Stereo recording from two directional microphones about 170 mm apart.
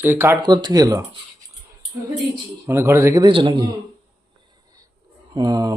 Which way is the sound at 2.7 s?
15° right (ahead or behind).